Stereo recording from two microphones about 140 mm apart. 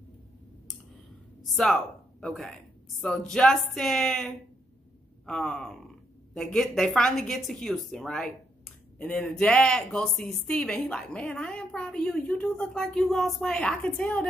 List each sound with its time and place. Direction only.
1.5 s a woman's voice: 5° left (ahead or behind)